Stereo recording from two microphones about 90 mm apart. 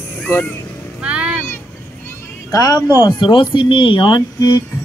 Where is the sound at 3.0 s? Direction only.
60° left (ahead or behind).